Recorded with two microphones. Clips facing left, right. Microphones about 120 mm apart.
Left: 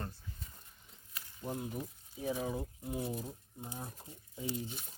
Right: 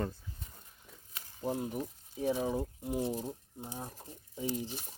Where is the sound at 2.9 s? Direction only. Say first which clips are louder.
Right 5 dB; 30° right (ahead or behind).